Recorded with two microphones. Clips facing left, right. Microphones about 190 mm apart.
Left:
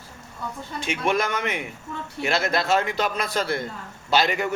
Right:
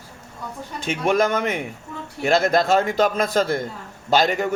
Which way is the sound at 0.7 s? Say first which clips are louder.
Right 4 dB; 45° right (ahead or behind).